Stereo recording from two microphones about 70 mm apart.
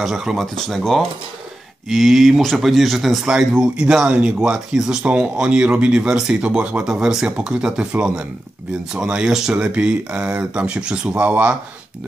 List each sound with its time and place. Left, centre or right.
0.0 s speech: centre
8.9 s speech: centre